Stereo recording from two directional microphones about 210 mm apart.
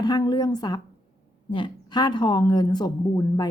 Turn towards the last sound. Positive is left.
turn(degrees=20)  # may be behind; listen again after turning